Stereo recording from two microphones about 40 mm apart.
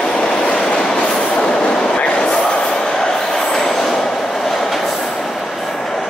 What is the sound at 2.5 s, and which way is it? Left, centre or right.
Vehicle, left.